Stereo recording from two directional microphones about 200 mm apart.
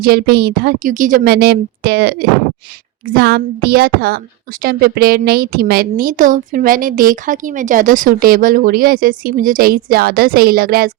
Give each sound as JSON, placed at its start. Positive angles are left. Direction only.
{"t": 0.0, "sound": "speech", "side_deg": -50}